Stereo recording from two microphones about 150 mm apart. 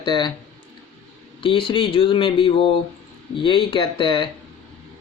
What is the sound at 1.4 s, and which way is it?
Speech, 35° left (ahead or behind).